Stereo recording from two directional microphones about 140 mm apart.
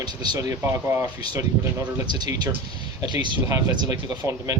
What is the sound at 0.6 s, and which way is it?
Speech, 15° right (ahead or behind).